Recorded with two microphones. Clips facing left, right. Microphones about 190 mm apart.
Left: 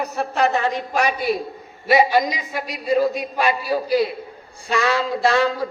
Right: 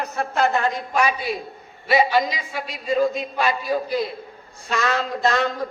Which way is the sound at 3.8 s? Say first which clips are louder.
Left 5 dB; 80° left.